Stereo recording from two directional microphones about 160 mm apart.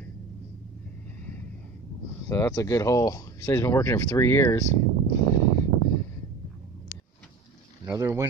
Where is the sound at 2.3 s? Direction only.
15° left (ahead or behind).